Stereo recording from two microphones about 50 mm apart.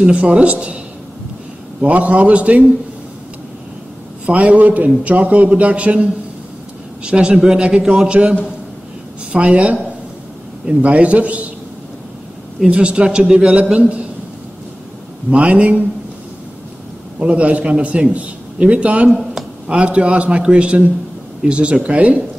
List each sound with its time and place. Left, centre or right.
0.0 s a man's voice: right
1.8 s a man's voice: right
4.3 s a man's voice: right
7.1 s a man's voice: centre
12.6 s a man's voice: right
15.3 s a man's voice: right
17.2 s a man's voice: right